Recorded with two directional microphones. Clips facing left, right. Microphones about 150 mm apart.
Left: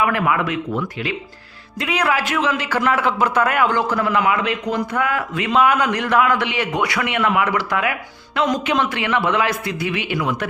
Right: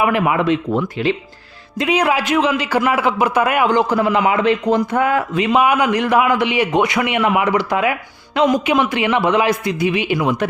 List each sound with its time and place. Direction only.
0.0 s speech: 20° right (ahead or behind)
1.8 s a man's voice: 20° right (ahead or behind)
5.5 s a man's voice: 10° right (ahead or behind)
8.4 s a man's voice: 10° right (ahead or behind)